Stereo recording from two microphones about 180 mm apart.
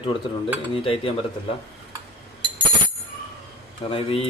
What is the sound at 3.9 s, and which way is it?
Speech, 30° left (ahead or behind).